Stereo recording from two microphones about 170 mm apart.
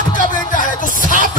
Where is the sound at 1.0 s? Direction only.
50° left (ahead or behind).